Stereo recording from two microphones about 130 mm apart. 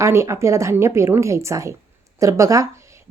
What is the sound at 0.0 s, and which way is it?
Speech, 20° right (ahead or behind).